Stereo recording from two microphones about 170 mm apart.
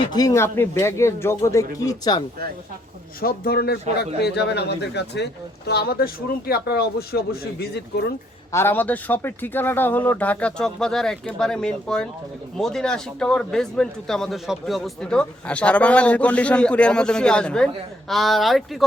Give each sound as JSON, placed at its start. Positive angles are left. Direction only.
{"t": 0.0, "sound": "speech", "side_deg": 25}
{"t": 3.2, "sound": "a man's voice", "side_deg": 60}
{"t": 8.5, "sound": "a man's voice", "side_deg": 10}